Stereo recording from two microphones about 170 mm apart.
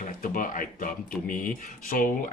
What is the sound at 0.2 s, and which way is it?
Speech, 55° left (ahead or behind).